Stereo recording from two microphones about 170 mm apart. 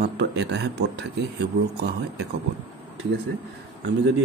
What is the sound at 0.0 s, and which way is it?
A man's voice, 90° right.